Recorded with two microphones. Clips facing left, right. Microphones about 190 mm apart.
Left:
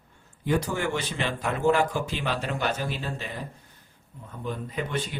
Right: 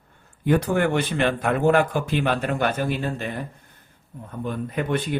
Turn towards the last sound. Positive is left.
turn(degrees=-55)  # may be behind; listen again after turning